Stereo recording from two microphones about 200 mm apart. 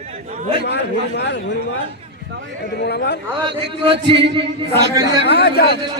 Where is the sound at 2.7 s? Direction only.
55° left (ahead or behind).